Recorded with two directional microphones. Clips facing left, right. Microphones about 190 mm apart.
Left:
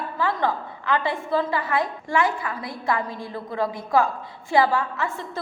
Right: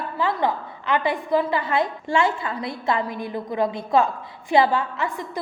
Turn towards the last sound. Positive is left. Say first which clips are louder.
# right 1 dB
turn(degrees=-15)  # may be behind; listen again after turning